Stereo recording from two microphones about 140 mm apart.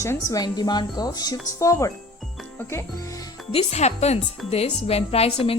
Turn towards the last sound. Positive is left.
turn(degrees=45)  # may be behind; listen again after turning